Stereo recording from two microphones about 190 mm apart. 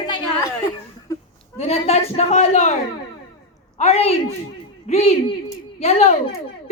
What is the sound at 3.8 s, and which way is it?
A woman's voice, 35° left (ahead or behind).